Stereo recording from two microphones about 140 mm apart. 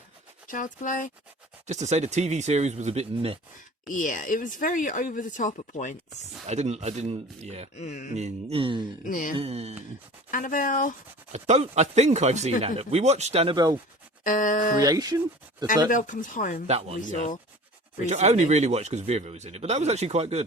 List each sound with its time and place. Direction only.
0.4 s speech: 70° left (ahead or behind)
1.6 s speech: 55° right (ahead or behind)
3.8 s speech: 70° left (ahead or behind)
6.5 s speech: 55° right (ahead or behind)
7.8 s a sound: 55° left (ahead or behind)
8.1 s speech: 50° right (ahead or behind)
9.0 s speech: 70° left (ahead or behind)
9.3 s speech: 45° right (ahead or behind)
10.3 s speech: 75° left (ahead or behind)
11.3 s speech: 55° right (ahead or behind)
14.3 s speech: 70° left (ahead or behind)
14.8 s speech: 25° right (ahead or behind)
15.9 s speech: 65° left (ahead or behind)
16.6 s speech: 50° right (ahead or behind)